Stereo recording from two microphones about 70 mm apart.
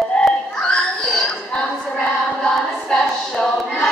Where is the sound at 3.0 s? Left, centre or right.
Centre.